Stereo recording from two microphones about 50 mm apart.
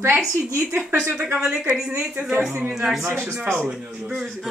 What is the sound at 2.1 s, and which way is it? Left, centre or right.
Speech, centre.